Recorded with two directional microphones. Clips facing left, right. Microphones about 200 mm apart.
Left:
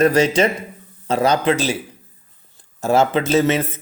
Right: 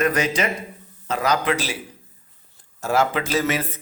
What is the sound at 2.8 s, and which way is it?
Speech, 25° left (ahead or behind).